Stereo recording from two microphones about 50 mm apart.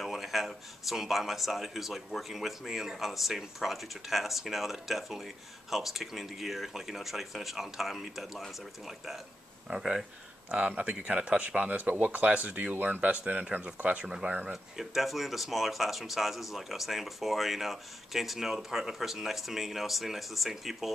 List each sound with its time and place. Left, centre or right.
0.0 s speech: centre
9.7 s speech: centre
10.5 s speech: right
14.5 s speech: centre